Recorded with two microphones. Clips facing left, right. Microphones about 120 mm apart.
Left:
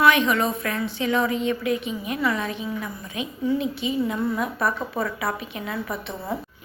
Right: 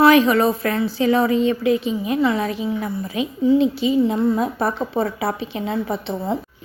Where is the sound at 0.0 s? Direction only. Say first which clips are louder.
Right 6 dB; 35° right (ahead or behind).